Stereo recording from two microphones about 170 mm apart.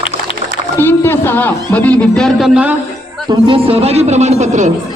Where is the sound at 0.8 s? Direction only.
15° left (ahead or behind).